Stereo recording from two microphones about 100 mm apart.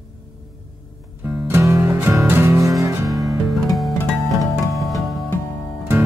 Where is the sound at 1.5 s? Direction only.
30° right (ahead or behind).